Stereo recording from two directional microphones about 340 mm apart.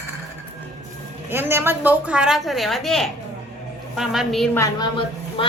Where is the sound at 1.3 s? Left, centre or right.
Centre.